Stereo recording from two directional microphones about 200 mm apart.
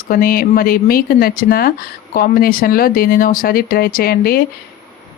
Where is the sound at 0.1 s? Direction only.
45° left (ahead or behind).